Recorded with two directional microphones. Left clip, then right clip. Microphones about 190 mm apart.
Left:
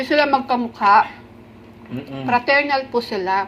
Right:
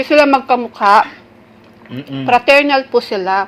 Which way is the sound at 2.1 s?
45° right (ahead or behind).